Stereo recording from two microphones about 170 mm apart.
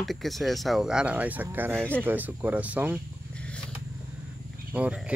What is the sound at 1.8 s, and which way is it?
Speech, 10° left (ahead or behind).